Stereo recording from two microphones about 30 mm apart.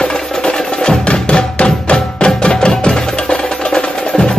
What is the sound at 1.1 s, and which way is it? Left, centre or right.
Music, left.